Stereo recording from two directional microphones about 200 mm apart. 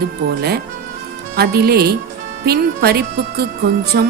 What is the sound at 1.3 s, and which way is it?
Music, 50° right (ahead or behind).